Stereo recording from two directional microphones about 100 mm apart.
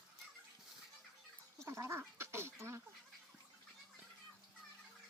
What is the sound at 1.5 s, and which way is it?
Duck, 25° right (ahead or behind).